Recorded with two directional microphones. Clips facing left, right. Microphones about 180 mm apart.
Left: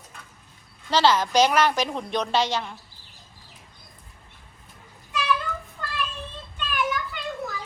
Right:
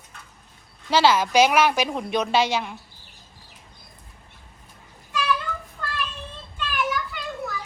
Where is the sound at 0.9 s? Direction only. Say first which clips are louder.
Right 2 dB; 10° right (ahead or behind).